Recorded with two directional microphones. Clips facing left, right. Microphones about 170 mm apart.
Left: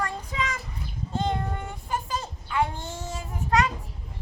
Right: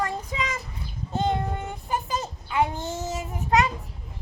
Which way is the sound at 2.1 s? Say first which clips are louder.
Right 2 dB; 25° right (ahead or behind).